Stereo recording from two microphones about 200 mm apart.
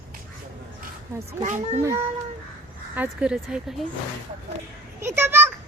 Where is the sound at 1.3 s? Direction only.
35° right (ahead or behind).